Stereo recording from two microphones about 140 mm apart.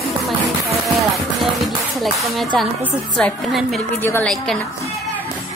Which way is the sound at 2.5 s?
5° left (ahead or behind).